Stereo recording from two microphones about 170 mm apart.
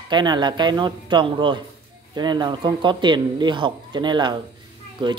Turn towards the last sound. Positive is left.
turn(degrees=-25)  # may be behind; listen again after turning